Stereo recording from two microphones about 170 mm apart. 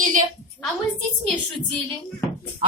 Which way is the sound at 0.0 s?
50° right (ahead or behind).